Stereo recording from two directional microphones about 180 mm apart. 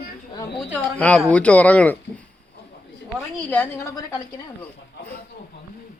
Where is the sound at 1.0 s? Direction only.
5° left (ahead or behind).